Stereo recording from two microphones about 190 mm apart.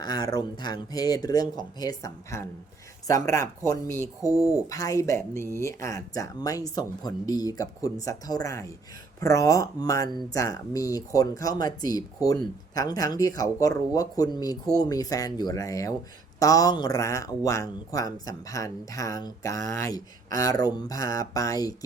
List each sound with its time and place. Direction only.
0.0 s speech: 20° left (ahead or behind)